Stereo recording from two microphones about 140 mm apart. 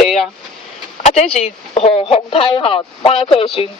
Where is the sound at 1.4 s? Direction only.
45° left (ahead or behind).